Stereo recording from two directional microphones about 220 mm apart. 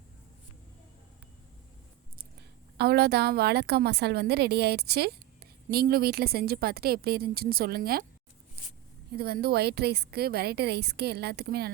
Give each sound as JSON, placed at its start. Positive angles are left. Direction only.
{"t": 2.7, "sound": "a woman's voice", "side_deg": -45}
{"t": 9.1, "sound": "a woman's voice", "side_deg": -45}